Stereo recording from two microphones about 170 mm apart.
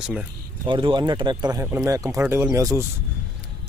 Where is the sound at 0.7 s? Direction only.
30° right (ahead or behind).